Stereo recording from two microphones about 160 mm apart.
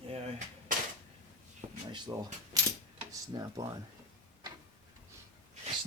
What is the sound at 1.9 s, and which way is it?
Speech, 25° right (ahead or behind).